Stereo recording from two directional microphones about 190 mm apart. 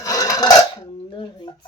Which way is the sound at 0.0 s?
20° left (ahead or behind).